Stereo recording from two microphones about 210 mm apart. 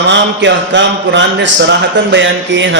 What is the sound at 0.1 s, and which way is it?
Speech, 60° right (ahead or behind).